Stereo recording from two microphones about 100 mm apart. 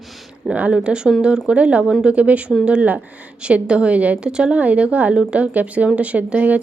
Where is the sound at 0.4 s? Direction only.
10° right (ahead or behind).